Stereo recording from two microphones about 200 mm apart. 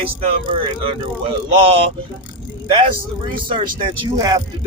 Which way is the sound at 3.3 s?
25° right (ahead or behind).